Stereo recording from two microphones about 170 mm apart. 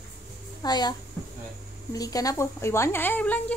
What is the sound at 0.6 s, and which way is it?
Speech, 25° left (ahead or behind).